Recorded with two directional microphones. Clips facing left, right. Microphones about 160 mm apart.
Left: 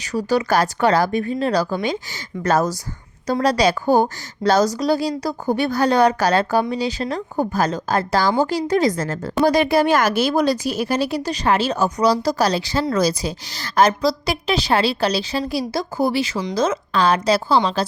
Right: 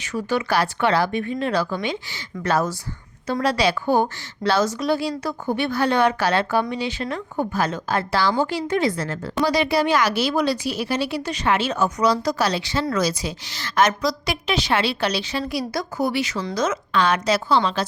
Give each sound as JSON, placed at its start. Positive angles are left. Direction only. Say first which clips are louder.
{"t": 0.0, "sound": "a woman's voice", "louder": "left 4 dB", "side_deg": 35}